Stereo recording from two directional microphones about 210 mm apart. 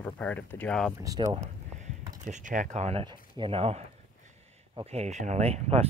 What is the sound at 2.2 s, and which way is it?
Speech, 35° right (ahead or behind).